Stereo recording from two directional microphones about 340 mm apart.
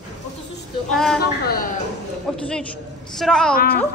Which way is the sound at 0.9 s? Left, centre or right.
Centre.